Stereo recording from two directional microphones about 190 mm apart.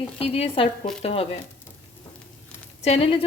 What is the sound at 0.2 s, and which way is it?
Speech, 30° left (ahead or behind).